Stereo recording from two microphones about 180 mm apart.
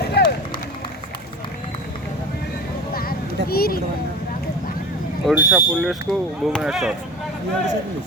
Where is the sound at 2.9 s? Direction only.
55° left (ahead or behind).